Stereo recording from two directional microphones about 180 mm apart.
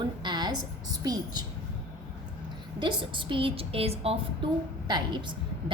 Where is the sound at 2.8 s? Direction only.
25° right (ahead or behind).